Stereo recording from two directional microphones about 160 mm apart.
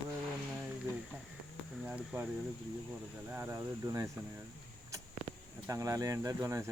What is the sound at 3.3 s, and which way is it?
Speech, 15° right (ahead or behind).